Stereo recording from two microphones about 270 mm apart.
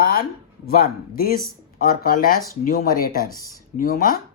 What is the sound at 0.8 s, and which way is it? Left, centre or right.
Speech, left.